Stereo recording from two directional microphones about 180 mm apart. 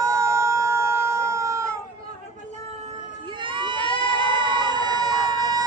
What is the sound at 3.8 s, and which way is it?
Crowd, 30° left (ahead or behind).